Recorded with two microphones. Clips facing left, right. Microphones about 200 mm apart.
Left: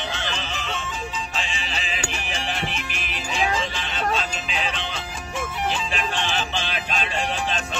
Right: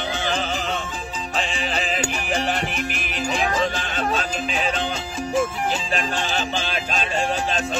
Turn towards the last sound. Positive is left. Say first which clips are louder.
# right 3 dB
turn(degrees=-40)  # may be behind; listen again after turning